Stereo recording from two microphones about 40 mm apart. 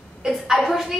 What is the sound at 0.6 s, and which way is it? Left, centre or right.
Speech, centre.